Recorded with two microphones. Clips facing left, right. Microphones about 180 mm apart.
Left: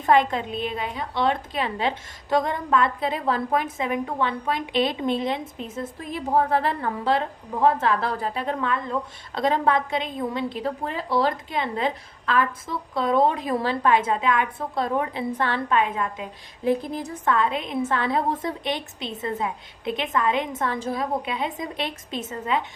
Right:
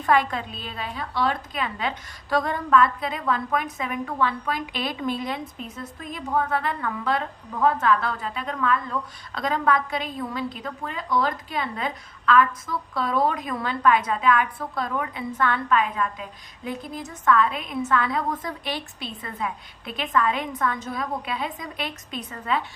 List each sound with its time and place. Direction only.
0.0 s a woman's voice: 25° left (ahead or behind)
16.9 s a woman's voice: 35° left (ahead or behind)